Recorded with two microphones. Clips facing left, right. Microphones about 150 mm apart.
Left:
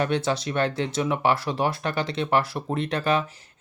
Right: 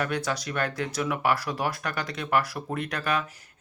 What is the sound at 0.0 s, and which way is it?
Speech, 25° left (ahead or behind).